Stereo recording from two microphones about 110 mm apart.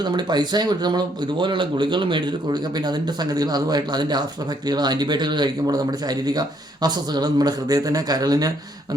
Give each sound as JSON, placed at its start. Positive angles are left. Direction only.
{"t": 0.0, "sound": "speech", "side_deg": -40}